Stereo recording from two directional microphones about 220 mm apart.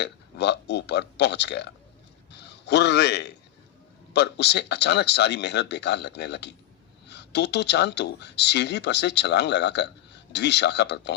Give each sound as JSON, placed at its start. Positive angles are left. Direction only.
{"t": 0.0, "sound": "a man's voice", "side_deg": 50}